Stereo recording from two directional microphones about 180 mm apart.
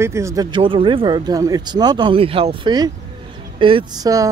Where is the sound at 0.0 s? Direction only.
15° right (ahead or behind).